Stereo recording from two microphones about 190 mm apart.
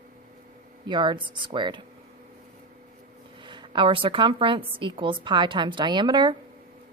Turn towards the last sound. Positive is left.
turn(degrees=-25)  # may be behind; listen again after turning